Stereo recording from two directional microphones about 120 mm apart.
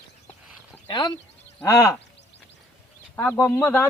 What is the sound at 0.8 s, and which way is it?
Speech, 40° left (ahead or behind).